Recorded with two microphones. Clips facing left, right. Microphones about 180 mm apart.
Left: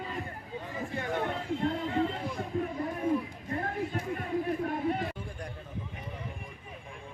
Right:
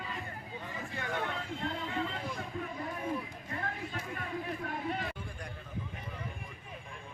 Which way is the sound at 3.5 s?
40° left (ahead or behind).